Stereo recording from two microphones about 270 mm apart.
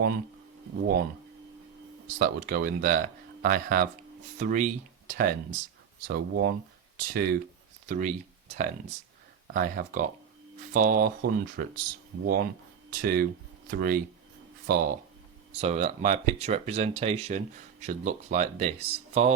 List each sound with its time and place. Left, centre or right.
2.1 s speech: right